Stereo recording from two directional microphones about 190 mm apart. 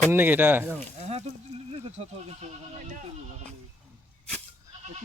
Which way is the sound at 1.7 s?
35° right (ahead or behind).